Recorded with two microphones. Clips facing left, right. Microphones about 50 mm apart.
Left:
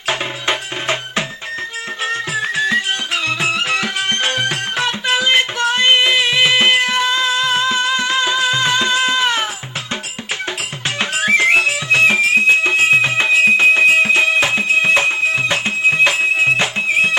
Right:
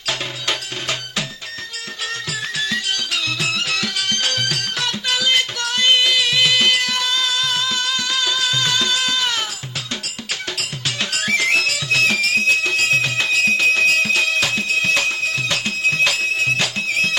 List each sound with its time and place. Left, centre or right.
0.1 s music: left
10.8 s music: left